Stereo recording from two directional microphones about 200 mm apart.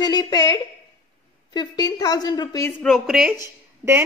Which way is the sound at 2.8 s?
Centre (ahead or behind).